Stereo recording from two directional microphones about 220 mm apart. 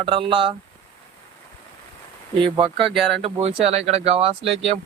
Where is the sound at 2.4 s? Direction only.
20° right (ahead or behind).